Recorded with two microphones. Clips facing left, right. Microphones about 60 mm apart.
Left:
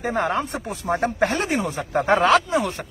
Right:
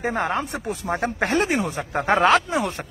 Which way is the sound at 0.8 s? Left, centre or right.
Centre.